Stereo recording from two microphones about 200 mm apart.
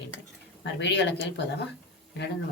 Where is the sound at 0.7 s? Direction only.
60° left (ahead or behind).